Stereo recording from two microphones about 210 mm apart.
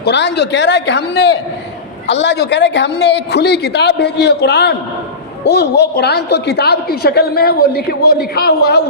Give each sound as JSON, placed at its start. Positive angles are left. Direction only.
{"t": 0.0, "sound": "a woman's voice", "side_deg": 55}